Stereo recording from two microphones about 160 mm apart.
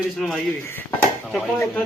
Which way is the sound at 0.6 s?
15° left (ahead or behind).